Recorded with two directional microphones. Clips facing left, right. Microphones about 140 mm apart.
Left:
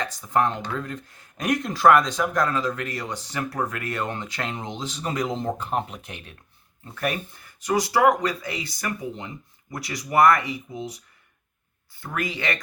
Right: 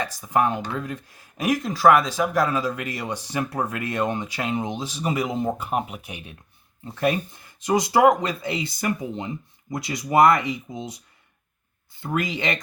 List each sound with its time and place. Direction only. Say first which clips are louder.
0.0 s speech: right 1 dB; 10° right (ahead or behind)
11.9 s speech: right 3 dB; 20° right (ahead or behind)